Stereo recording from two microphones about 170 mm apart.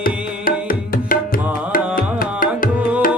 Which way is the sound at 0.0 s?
55° left (ahead or behind).